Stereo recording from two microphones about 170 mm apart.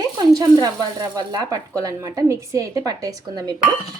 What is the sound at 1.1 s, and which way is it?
A woman's voice, 20° right (ahead or behind).